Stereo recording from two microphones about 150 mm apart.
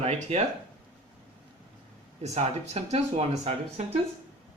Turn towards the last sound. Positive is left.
turn(degrees=-45)  # may be behind; listen again after turning